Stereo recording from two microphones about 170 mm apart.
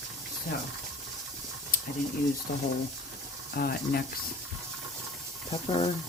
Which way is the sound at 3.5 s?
65° left (ahead or behind).